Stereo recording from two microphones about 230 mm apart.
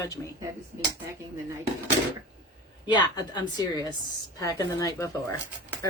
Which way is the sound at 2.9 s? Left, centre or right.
Centre.